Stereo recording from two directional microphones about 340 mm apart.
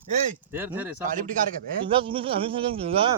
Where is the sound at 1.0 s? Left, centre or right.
Right.